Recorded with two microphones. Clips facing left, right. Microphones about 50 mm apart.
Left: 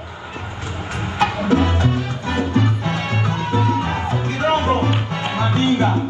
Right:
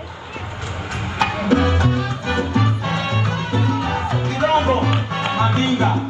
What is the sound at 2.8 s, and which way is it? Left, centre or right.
Music, left.